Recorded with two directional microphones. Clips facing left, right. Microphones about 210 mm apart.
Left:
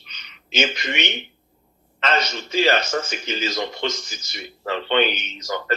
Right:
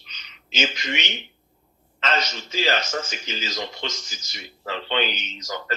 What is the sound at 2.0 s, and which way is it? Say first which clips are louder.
A man's voice: left 3 dB; 60° left (ahead or behind).